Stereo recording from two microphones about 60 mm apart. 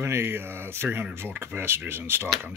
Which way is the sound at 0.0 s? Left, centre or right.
Right.